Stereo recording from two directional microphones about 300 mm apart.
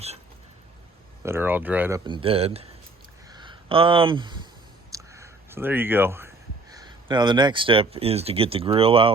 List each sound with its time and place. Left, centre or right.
1.2 s speech: centre
3.2 s a sound: centre
4.9 s speech: centre